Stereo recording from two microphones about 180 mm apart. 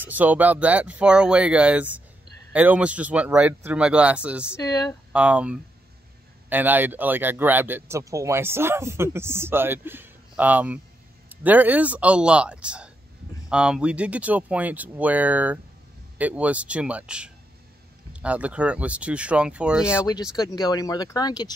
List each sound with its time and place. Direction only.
0.0 s speech: 10° right (ahead or behind)
4.6 s speech: 20° left (ahead or behind)
5.1 s speech: 5° right (ahead or behind)
19.9 s speech: 15° left (ahead or behind)